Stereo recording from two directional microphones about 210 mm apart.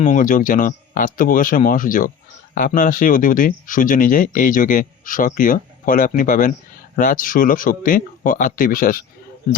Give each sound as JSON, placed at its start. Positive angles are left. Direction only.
{"t": 0.0, "sound": "speech", "side_deg": 35}